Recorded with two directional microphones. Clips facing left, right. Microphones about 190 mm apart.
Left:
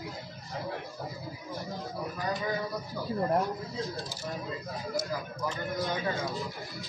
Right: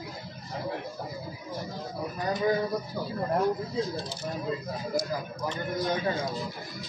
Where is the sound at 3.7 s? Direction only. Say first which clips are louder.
Right 5 dB; 15° right (ahead or behind).